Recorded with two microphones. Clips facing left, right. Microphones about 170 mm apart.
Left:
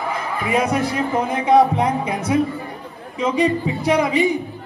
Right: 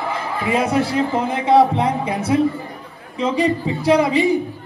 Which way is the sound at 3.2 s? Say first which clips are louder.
Even; 30° right (ahead or behind).